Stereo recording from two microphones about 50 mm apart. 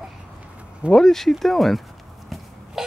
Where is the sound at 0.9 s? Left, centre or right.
Centre.